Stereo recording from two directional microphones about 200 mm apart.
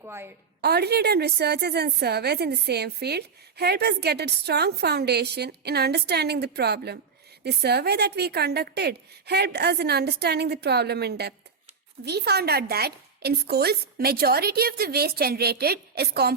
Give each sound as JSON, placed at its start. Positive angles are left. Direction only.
{"t": 0.0, "sound": "a woman's voice", "side_deg": -10}
{"t": 0.6, "sound": "a woman's voice", "side_deg": -55}